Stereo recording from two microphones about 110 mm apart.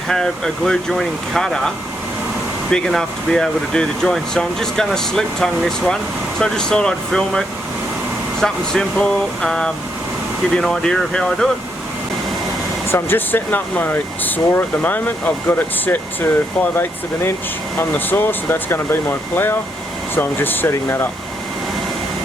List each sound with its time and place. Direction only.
0.1 s speech: 5° left (ahead or behind)
12.9 s speech: 20° left (ahead or behind)
17.7 s speech: 20° left (ahead or behind)
20.1 s speech: 20° left (ahead or behind)